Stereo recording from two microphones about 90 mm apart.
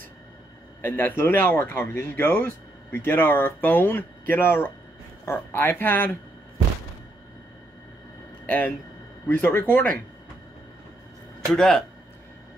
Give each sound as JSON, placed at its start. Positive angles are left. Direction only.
{"t": 0.8, "sound": "speech", "side_deg": 20}
{"t": 8.5, "sound": "speech", "side_deg": 20}
{"t": 11.5, "sound": "speech", "side_deg": 5}